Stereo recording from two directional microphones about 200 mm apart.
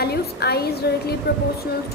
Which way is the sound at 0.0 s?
50° left (ahead or behind).